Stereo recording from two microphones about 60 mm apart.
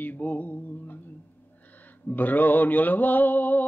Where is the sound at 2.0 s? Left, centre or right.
Left.